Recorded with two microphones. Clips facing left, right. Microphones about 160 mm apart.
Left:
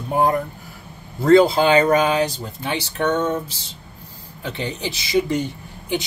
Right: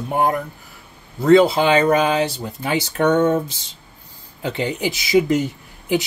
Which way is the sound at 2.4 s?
15° right (ahead or behind).